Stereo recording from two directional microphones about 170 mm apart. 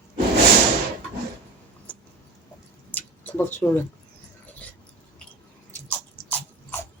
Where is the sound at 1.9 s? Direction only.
10° left (ahead or behind).